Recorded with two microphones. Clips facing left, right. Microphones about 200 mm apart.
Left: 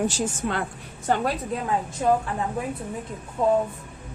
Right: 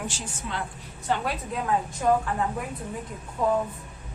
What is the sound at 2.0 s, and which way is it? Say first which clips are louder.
Speech: left 2 dB; 25° left (ahead or behind).